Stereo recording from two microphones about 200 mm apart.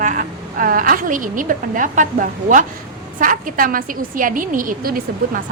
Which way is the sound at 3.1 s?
45° right (ahead or behind).